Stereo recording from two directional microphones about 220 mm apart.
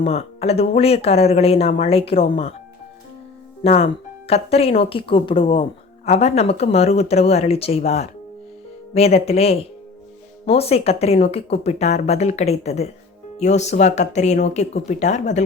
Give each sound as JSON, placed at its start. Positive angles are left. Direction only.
{"t": 0.0, "sound": "speech", "side_deg": 25}
{"t": 3.6, "sound": "speech", "side_deg": 25}